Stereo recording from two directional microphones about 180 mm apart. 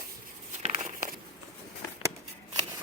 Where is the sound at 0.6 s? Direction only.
45° right (ahead or behind).